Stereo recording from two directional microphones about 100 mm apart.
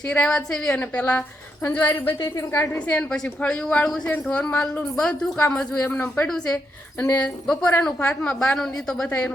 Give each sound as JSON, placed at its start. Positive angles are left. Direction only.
{"t": 0.1, "sound": "a woman's voice", "side_deg": 10}
{"t": 6.2, "sound": "speech", "side_deg": 5}
{"t": 7.0, "sound": "speech", "side_deg": 15}
{"t": 9.0, "sound": "speech", "side_deg": 15}